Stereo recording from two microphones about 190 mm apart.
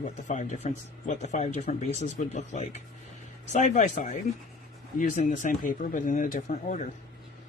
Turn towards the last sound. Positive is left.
turn(degrees=40)  # may be behind; listen again after turning